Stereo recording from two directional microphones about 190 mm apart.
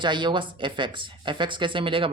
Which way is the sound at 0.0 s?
25° right (ahead or behind).